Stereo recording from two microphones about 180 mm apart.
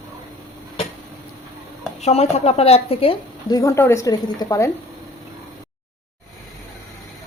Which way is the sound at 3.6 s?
15° left (ahead or behind).